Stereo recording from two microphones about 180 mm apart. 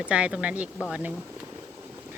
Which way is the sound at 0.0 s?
5° right (ahead or behind).